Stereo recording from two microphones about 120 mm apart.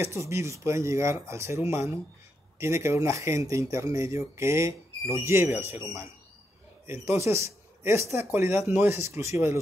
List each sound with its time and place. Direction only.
0.0 s speech: 25° right (ahead or behind)